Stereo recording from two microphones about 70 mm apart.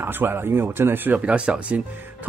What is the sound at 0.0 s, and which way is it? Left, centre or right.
Speech, right.